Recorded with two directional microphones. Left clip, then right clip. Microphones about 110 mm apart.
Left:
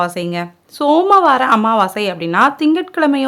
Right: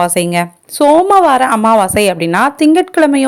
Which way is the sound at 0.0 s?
50° right (ahead or behind).